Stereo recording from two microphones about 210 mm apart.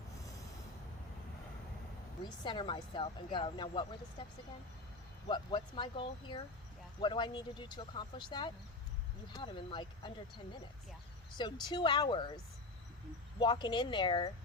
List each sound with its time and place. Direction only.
2.2 s speech: 20° left (ahead or behind)
5.3 s speech: 20° left (ahead or behind)
11.7 s speech: 20° left (ahead or behind)
13.4 s speech: 20° left (ahead or behind)